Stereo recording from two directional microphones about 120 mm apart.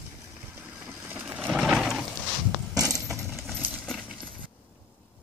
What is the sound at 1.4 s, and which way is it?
Sewing machine, 5° right (ahead or behind).